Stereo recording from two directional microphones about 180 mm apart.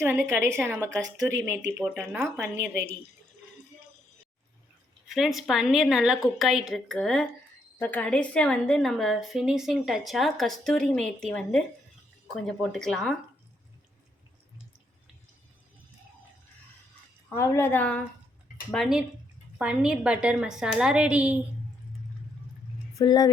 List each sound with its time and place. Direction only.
0.0 s speech: 10° right (ahead or behind)
5.0 s a woman's voice: centre (ahead or behind)
17.2 s a woman's voice: 15° left (ahead or behind); by 21.3 s 5° right (ahead or behind)
23.0 s speech: 20° left (ahead or behind)